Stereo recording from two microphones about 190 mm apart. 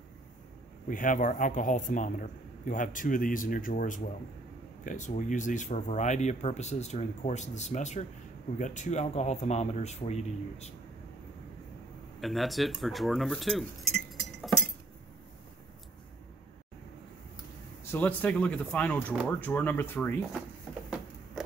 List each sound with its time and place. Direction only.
0.8 s a man's voice: 45° left (ahead or behind)
12.2 s speech: centre (ahead or behind)
17.9 s speech: 10° left (ahead or behind)